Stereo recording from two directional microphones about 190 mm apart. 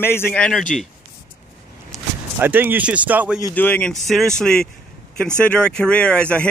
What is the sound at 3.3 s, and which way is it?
Speech, 15° left (ahead or behind).